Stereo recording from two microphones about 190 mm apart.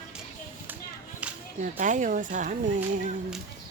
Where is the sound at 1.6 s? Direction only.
40° right (ahead or behind).